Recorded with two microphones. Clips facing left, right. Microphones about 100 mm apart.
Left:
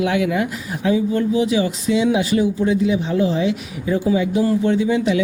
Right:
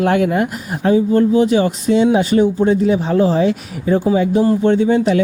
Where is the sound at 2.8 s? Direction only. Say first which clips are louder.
Right 4 dB; 45° right (ahead or behind).